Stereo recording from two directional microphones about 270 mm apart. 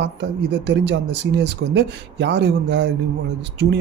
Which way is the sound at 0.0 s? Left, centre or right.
Right.